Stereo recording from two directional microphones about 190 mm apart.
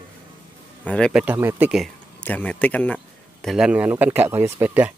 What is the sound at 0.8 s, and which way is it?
Speech, 5° left (ahead or behind).